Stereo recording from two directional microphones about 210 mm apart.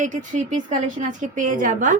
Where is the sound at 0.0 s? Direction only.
35° right (ahead or behind).